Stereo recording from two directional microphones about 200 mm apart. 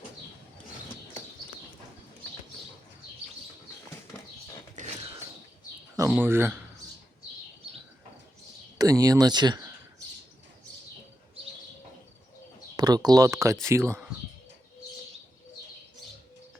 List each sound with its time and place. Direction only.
4.7 s a sound: 35° right (ahead or behind)
6.1 s speech: 10° right (ahead or behind)
8.8 s speech: 20° right (ahead or behind)
12.7 s speech: 20° right (ahead or behind)